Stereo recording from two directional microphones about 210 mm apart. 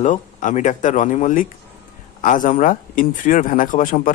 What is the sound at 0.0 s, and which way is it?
Speech, 35° left (ahead or behind).